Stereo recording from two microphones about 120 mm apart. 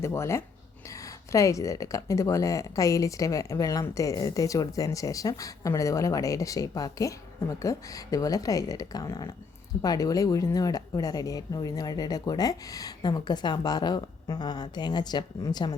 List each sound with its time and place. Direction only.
0.0 s speech: 25° left (ahead or behind)